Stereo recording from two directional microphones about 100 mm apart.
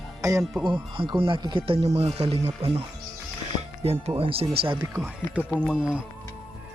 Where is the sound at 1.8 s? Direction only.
90° right.